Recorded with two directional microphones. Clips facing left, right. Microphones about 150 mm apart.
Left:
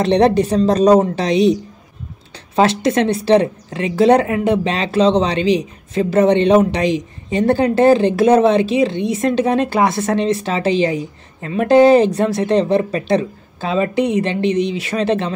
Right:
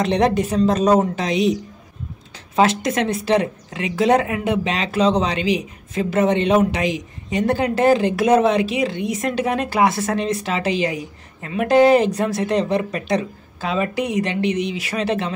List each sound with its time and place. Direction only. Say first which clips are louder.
0.0 s speech: left 5 dB; 30° left (ahead or behind)
2.5 s a woman's voice: left 3 dB; 30° left (ahead or behind)